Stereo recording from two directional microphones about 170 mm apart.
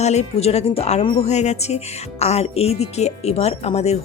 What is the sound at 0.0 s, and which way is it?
Speech, 40° left (ahead or behind).